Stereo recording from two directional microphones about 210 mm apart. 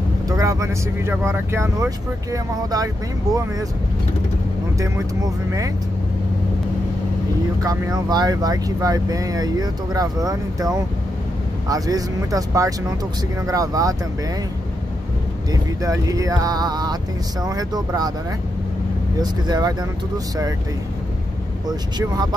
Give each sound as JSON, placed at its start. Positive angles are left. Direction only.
{"t": 0.3, "sound": "speech", "side_deg": -15}
{"t": 4.7, "sound": "speech", "side_deg": -15}
{"t": 7.6, "sound": "speech", "side_deg": -15}
{"t": 15.5, "sound": "speech", "side_deg": -15}
{"t": 19.4, "sound": "speech", "side_deg": -20}
{"t": 21.6, "sound": "speech", "side_deg": -20}